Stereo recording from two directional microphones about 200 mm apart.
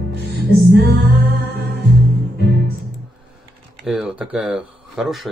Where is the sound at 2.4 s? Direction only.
60° left (ahead or behind).